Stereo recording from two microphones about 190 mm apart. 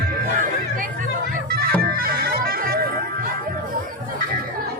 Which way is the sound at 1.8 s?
50° right (ahead or behind).